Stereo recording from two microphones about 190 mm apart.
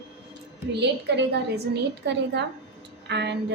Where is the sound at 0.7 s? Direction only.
65° right (ahead or behind).